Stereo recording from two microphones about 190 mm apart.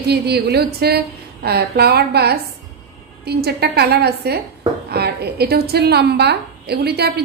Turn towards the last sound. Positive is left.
turn(degrees=-60)  # may be behind; listen again after turning